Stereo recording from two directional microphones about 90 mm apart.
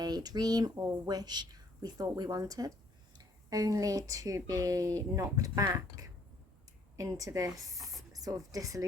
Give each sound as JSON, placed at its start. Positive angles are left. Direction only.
{"t": 0.0, "sound": "speech", "side_deg": -50}